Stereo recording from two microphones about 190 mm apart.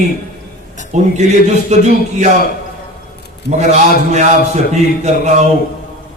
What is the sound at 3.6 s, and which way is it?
A man's voice, 35° right (ahead or behind).